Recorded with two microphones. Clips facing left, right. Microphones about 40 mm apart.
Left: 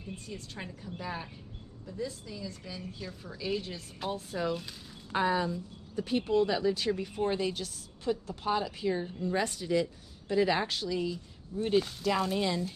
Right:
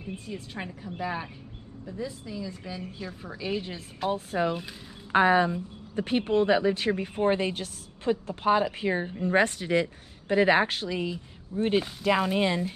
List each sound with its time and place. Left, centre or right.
0.0 s a woman's voice: right
5.1 s speech: right